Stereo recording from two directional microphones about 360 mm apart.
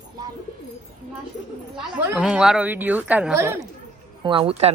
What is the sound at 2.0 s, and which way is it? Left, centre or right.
A woman's voice, centre.